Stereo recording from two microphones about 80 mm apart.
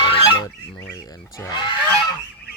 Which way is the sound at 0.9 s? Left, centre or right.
Left.